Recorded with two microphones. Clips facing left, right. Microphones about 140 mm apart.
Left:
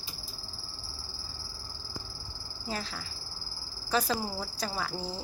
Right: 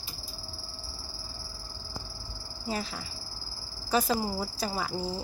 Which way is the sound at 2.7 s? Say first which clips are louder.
Right 3 dB; 10° right (ahead or behind).